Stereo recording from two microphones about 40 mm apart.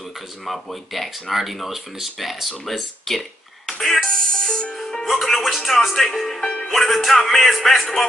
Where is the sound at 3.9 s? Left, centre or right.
Centre.